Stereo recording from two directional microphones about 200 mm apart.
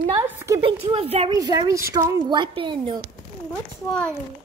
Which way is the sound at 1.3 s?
20° right (ahead or behind).